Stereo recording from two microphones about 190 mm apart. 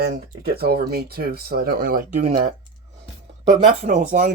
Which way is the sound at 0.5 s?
55° right (ahead or behind).